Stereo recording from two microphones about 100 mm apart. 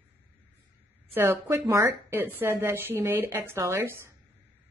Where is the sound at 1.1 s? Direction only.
25° right (ahead or behind).